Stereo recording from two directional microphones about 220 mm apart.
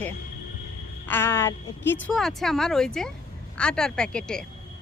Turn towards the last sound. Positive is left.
turn(degrees=5)  # may be behind; listen again after turning